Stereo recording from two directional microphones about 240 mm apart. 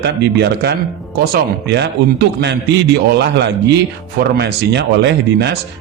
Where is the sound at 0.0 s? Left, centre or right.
Right.